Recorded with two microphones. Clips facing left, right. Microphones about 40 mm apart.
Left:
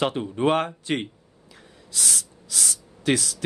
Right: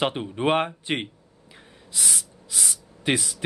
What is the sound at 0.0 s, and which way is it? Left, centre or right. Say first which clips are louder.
Speech: left 1 dB; centre.